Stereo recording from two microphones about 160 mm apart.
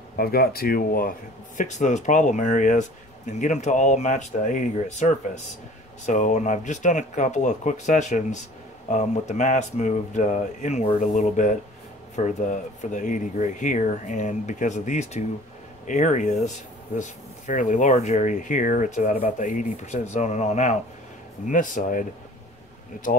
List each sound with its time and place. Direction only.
0.2 s speech: 70° left (ahead or behind)
1.6 s speech: 50° left (ahead or behind)